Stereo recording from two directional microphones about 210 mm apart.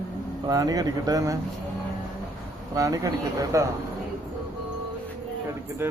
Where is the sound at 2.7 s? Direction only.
15° right (ahead or behind).